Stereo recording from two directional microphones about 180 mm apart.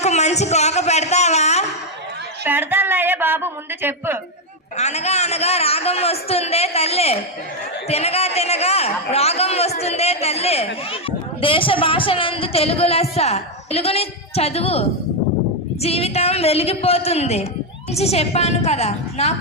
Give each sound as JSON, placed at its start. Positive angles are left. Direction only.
{"t": 0.0, "sound": "a woman's voice", "side_deg": 40}
{"t": 2.4, "sound": "a woman's voice", "side_deg": -10}
{"t": 4.8, "sound": "a woman's voice", "side_deg": 40}